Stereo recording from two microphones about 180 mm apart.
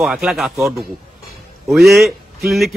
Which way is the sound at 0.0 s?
Centre (ahead or behind).